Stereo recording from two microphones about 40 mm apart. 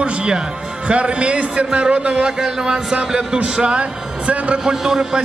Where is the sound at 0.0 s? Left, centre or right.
Right.